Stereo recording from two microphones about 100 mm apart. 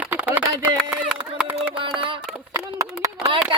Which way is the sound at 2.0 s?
55° right (ahead or behind).